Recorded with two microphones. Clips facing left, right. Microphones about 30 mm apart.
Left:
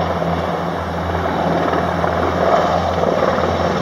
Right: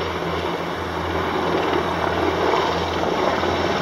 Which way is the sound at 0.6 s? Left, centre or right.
Centre.